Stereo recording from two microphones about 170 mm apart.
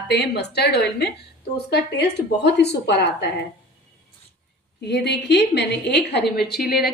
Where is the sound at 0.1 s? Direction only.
80° left.